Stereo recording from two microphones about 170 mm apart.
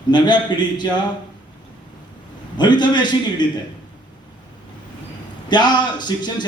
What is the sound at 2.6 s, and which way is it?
Speech, 25° left (ahead or behind).